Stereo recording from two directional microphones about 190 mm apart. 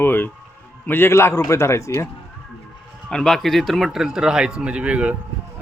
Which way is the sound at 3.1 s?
5° left (ahead or behind).